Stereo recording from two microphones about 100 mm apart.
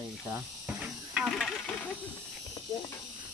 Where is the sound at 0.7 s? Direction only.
5° right (ahead or behind).